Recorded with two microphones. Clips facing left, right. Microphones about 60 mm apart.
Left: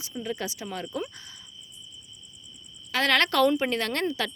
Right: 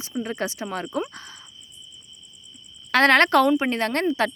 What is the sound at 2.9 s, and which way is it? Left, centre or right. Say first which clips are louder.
Speech: right 7 dB; right.